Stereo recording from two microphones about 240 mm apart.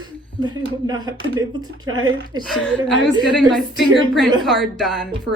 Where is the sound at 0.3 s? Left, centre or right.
Centre.